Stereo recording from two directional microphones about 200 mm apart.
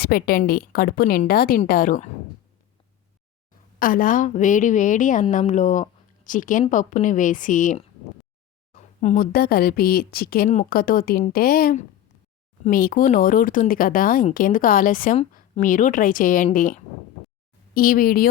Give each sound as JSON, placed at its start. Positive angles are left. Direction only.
{"t": 0.0, "sound": "a woman's voice", "side_deg": 50}
{"t": 3.8, "sound": "a woman's voice", "side_deg": 45}